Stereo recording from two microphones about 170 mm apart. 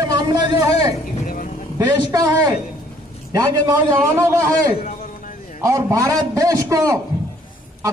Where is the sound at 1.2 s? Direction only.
55° left (ahead or behind).